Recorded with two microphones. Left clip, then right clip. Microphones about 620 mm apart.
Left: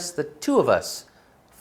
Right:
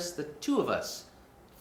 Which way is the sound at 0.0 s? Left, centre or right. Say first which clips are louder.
Left 8 dB; left.